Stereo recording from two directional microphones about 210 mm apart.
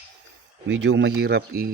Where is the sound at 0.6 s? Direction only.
55° right (ahead or behind).